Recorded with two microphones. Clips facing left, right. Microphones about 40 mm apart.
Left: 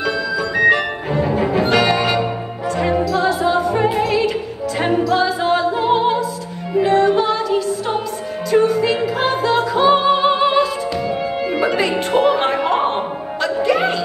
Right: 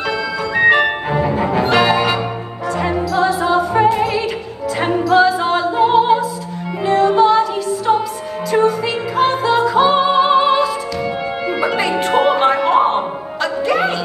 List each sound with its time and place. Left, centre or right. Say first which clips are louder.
1.2 s music: left 1 dB; centre
12.1 s music: right 1 dB; centre
12.4 s music: right 4 dB; centre